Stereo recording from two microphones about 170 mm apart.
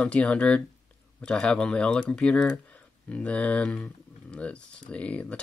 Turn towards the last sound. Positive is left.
turn(degrees=5)  # may be behind; listen again after turning